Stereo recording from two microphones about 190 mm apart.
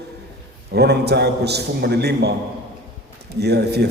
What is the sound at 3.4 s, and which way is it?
Speech, 60° right (ahead or behind).